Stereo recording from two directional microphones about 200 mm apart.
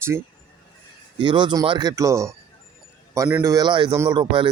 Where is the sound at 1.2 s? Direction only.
25° right (ahead or behind).